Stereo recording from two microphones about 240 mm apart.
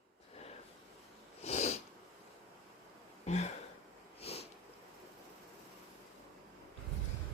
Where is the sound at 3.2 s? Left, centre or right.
Left.